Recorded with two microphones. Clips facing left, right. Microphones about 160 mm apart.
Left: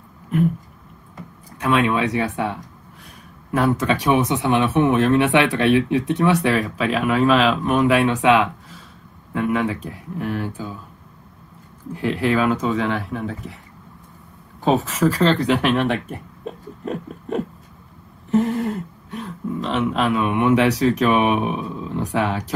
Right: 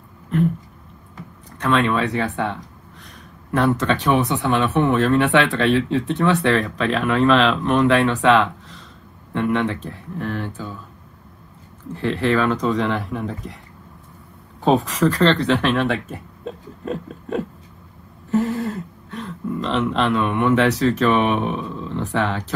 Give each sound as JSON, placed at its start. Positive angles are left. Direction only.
{"t": 1.6, "sound": "speech", "side_deg": 10}
{"t": 11.9, "sound": "speech", "side_deg": 15}
{"t": 14.6, "sound": "speech", "side_deg": 0}